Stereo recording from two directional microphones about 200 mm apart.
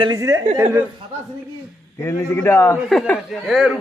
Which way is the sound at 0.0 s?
15° right (ahead or behind).